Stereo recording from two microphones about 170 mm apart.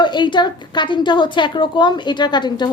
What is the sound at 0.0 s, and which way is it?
A woman's voice, 25° left (ahead or behind).